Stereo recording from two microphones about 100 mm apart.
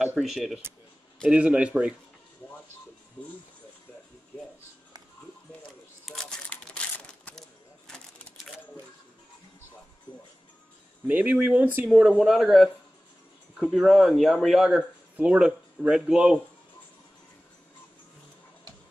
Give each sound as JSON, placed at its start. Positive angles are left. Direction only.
{"t": 0.0, "sound": "speech", "side_deg": -5}
{"t": 6.1, "sound": "crumpling", "side_deg": 0}
{"t": 6.5, "sound": "crumpling", "side_deg": 10}
{"t": 11.1, "sound": "speech", "side_deg": -15}
{"t": 12.2, "sound": "speech", "side_deg": 0}